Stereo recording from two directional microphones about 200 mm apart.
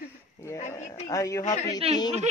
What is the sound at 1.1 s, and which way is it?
Speech, 15° left (ahead or behind).